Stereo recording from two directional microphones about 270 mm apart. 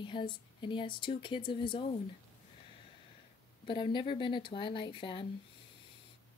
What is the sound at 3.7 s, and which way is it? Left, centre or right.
Speech, centre.